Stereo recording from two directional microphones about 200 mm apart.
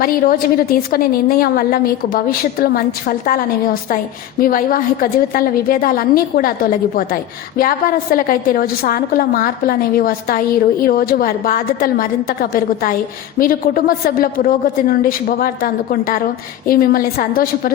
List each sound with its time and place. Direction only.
0.0 s a woman's voice: 45° left (ahead or behind)